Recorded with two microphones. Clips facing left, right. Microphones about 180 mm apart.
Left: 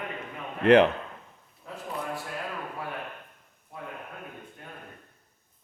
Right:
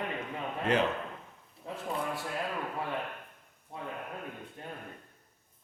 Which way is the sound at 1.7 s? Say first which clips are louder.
Right 1 dB; 25° right (ahead or behind).